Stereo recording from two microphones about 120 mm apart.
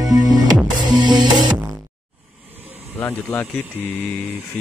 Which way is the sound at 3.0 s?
15° left (ahead or behind).